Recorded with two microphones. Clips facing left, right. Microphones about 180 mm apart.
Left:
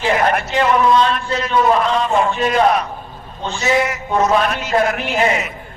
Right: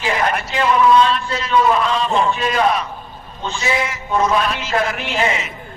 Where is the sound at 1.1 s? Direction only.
50° left (ahead or behind).